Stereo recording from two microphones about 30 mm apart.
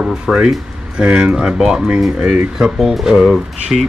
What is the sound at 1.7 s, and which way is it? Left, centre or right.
Speech, centre.